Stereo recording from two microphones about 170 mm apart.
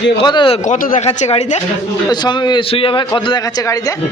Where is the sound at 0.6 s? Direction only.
50° left (ahead or behind).